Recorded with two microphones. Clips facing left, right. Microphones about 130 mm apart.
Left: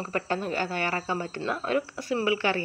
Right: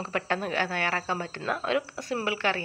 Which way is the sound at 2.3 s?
60° right (ahead or behind).